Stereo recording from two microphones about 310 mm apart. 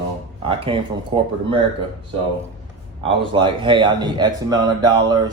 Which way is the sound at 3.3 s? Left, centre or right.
Centre.